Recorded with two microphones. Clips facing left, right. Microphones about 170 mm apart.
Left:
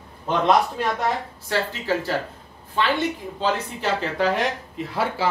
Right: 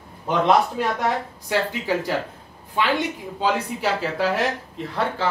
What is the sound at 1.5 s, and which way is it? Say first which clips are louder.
Speech: right 1 dB; 15° right (ahead or behind).